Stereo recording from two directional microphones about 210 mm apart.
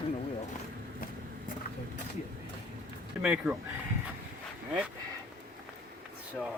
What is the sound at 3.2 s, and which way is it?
Speech, 5° right (ahead or behind).